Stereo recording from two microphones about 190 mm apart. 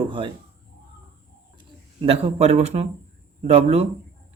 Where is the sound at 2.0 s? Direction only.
30° right (ahead or behind).